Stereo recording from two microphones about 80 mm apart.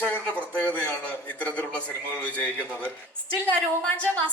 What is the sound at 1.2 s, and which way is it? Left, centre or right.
A man's voice, centre.